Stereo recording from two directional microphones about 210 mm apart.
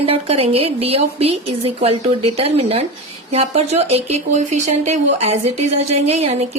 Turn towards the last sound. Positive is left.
turn(degrees=-30)  # may be behind; listen again after turning